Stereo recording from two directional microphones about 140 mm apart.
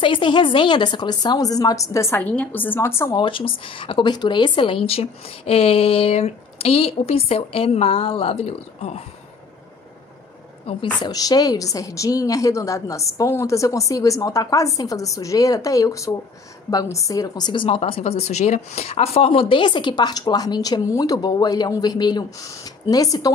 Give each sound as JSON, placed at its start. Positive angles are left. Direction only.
{"t": 0.0, "sound": "a woman's voice", "side_deg": 35}
{"t": 3.2, "sound": "speech", "side_deg": 40}
{"t": 10.7, "sound": "speech", "side_deg": 40}
{"t": 11.1, "sound": "a woman's voice", "side_deg": 25}